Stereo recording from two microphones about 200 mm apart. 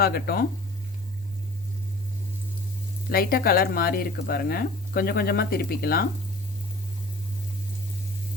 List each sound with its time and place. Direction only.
0.0 s speech: 50° left (ahead or behind)
3.1 s speech: 50° left (ahead or behind)